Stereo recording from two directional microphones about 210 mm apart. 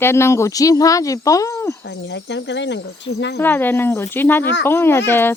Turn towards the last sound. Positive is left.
turn(degrees=10)  # may be behind; listen again after turning